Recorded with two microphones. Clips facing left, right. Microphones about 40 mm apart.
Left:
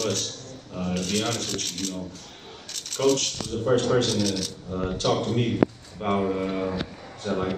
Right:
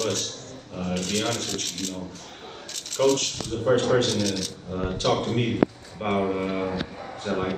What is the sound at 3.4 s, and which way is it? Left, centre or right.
A man's voice, right.